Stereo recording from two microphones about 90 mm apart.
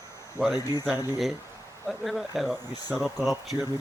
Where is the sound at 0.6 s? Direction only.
45° left (ahead or behind).